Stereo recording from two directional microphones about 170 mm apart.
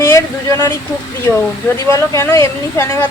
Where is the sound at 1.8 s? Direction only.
15° left (ahead or behind).